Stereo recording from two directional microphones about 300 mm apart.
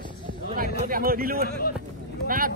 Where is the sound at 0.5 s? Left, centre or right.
Right.